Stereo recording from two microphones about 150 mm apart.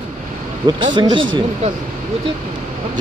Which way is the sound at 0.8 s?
30° right (ahead or behind).